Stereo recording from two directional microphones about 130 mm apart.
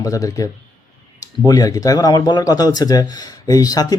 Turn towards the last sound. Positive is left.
turn(degrees=30)  # may be behind; listen again after turning